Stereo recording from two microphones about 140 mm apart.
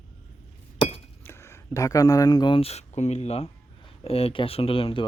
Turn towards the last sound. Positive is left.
turn(degrees=40)  # may be behind; listen again after turning